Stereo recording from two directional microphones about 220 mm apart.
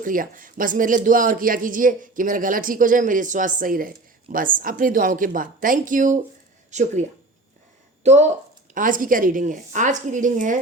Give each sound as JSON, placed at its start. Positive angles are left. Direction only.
{"t": 0.0, "sound": "speech", "side_deg": -40}
{"t": 8.0, "sound": "speech", "side_deg": -30}